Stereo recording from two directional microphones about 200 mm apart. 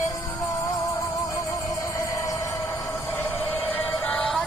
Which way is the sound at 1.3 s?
15° left (ahead or behind).